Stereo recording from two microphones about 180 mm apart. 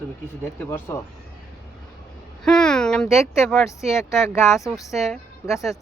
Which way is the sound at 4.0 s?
15° left (ahead or behind).